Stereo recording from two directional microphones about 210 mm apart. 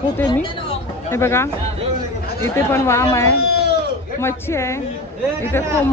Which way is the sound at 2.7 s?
15° left (ahead or behind).